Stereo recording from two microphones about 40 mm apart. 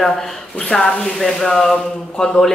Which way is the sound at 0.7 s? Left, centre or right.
Centre.